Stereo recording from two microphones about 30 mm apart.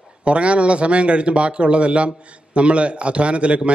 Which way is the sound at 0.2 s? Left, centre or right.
Right.